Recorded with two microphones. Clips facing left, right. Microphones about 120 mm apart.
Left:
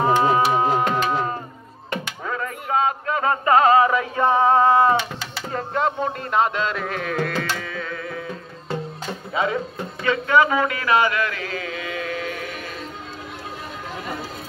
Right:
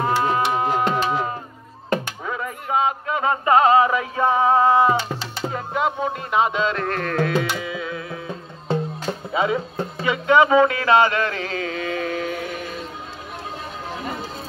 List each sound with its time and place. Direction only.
0.0 s music: 15° left (ahead or behind)
0.8 s music: 5° right (ahead or behind)
2.2 s a sound: 10° right (ahead or behind)
5.5 s music: 5° right (ahead or behind)
7.4 s music: 15° right (ahead or behind)
9.3 s speech: 20° right (ahead or behind)